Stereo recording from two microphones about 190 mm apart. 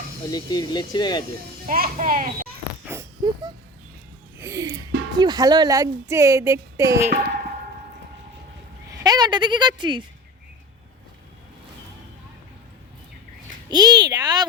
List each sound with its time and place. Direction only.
0.3 s speech: 20° left (ahead or behind)
1.6 s a child's voice: 50° right (ahead or behind)
2.8 s a sound: 15° right (ahead or behind)
4.4 s music: 15° right (ahead or behind)
5.1 s speech: 20° right (ahead or behind)
8.9 s speech: 20° right (ahead or behind)
13.7 s speech: 20° right (ahead or behind)